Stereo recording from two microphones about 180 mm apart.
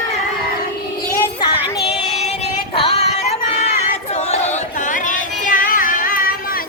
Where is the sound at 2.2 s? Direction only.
35° left (ahead or behind).